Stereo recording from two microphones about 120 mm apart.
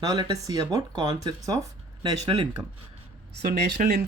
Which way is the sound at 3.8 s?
90° right.